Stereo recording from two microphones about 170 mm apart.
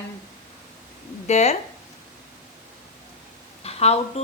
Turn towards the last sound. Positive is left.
turn(degrees=40)  # may be behind; listen again after turning